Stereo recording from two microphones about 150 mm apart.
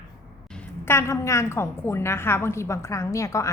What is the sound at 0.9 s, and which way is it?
A woman's voice, 20° left (ahead or behind).